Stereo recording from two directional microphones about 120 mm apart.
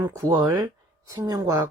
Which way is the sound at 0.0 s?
25° right (ahead or behind).